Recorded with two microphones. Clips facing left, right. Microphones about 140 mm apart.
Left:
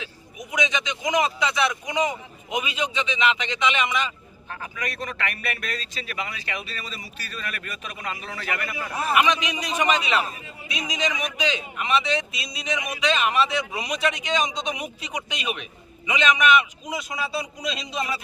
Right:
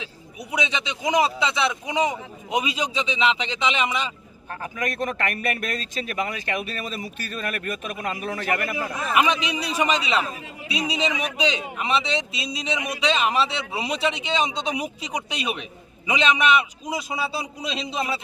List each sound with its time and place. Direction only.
0.3 s a man's voice: 30° right (ahead or behind)
4.6 s speech: 45° right (ahead or behind)
9.1 s a man's voice: 35° right (ahead or behind)